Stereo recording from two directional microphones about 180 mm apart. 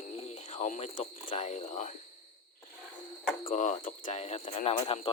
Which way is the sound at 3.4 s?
40° left (ahead or behind).